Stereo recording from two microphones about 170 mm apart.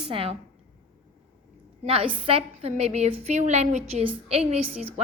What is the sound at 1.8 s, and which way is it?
A woman's voice, 35° right (ahead or behind).